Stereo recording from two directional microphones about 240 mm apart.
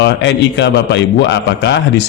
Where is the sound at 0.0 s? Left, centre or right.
Left.